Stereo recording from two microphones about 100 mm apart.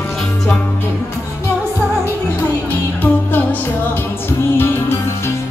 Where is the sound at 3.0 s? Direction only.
20° left (ahead or behind).